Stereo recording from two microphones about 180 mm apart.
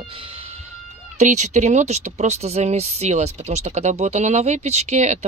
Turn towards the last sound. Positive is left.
turn(degrees=-40)  # may be behind; listen again after turning